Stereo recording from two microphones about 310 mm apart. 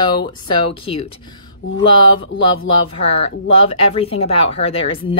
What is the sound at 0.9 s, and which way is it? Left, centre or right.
Speech, centre.